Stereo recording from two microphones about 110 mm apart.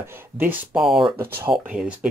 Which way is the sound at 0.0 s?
20° right (ahead or behind).